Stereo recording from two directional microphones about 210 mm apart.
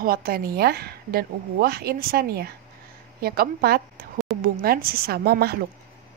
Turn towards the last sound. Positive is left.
turn(degrees=-50)  # may be behind; listen again after turning